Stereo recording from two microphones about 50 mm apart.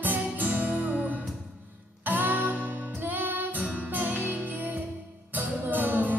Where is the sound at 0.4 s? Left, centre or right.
Right.